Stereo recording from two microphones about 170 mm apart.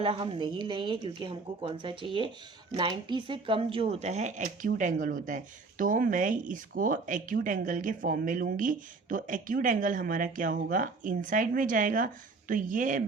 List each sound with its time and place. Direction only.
0.0 s speech: 30° right (ahead or behind); by 13.0 s 50° right (ahead or behind)